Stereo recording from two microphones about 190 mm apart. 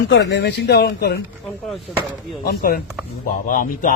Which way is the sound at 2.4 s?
50° left (ahead or behind).